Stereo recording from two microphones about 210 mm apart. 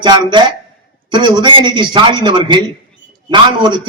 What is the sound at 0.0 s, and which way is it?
A man's voice, 20° right (ahead or behind).